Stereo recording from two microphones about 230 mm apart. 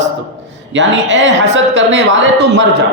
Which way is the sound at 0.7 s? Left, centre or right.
Right.